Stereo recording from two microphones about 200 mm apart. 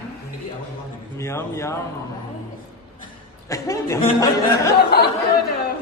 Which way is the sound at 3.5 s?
15° left (ahead or behind).